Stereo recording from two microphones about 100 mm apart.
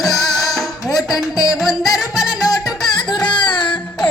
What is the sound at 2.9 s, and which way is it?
Music, 45° left (ahead or behind).